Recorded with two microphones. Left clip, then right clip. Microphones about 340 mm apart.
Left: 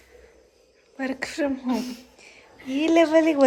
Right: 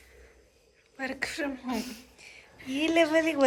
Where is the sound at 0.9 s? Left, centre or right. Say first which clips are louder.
Left 5 dB; centre.